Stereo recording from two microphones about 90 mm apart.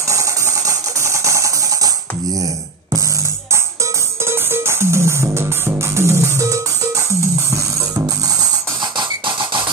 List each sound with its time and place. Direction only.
0.1 s music: 35° right (ahead or behind)
4.3 s music: 25° right (ahead or behind)